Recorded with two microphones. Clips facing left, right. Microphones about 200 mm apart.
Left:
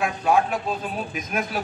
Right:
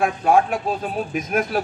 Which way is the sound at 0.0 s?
50° right (ahead or behind).